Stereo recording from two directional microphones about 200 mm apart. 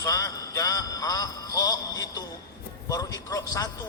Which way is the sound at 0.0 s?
15° left (ahead or behind).